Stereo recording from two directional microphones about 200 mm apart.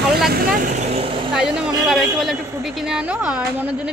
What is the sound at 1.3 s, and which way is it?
A woman's voice, 5° right (ahead or behind).